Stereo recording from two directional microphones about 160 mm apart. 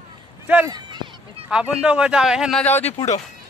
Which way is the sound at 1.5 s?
5° right (ahead or behind).